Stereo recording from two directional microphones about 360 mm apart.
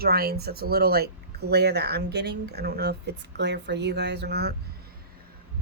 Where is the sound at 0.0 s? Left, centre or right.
Right.